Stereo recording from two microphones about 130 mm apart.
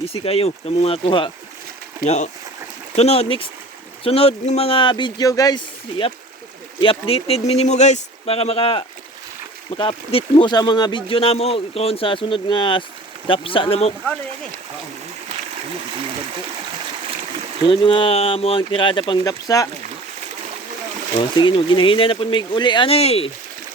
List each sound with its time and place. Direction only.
0.0 s speech: 45° left (ahead or behind)
2.0 s speech: 65° left (ahead or behind)
2.9 s speech: 55° left (ahead or behind); by 5.6 s 30° left (ahead or behind)
6.7 s speech: 45° left (ahead or behind)
17.7 s speech: 40° left (ahead or behind)
21.2 s speech: 40° left (ahead or behind)